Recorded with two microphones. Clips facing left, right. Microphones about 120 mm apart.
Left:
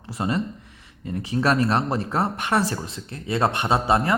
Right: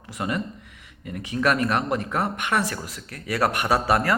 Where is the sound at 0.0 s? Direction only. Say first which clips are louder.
Left 3 dB; 30° left (ahead or behind).